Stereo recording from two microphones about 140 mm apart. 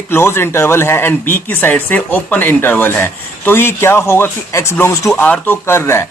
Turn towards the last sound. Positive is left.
turn(degrees=20)  # may be behind; listen again after turning